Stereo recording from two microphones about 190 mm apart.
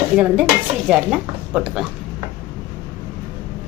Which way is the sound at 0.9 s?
5° right (ahead or behind).